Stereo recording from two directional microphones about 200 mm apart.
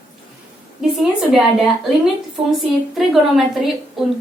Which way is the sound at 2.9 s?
Centre (ahead or behind).